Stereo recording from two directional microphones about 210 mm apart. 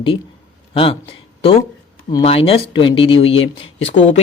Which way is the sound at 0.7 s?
25° left (ahead or behind).